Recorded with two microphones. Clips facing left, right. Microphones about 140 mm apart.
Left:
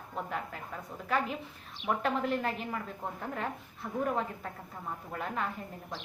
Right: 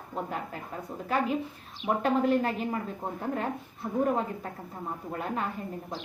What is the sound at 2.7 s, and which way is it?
A woman's voice, 25° right (ahead or behind).